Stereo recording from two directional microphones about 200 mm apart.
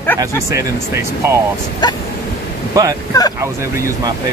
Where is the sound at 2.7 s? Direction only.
15° right (ahead or behind).